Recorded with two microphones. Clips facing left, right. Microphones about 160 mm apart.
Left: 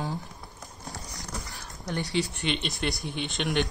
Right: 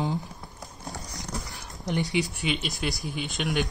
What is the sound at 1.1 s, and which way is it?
Dog, 20° right (ahead or behind).